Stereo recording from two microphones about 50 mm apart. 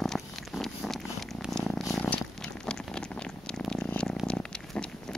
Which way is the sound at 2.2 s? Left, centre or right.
Centre.